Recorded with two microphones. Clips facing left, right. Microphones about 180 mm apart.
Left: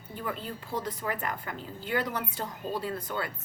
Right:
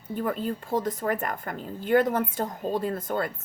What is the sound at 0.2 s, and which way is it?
A woman's voice, 50° right (ahead or behind).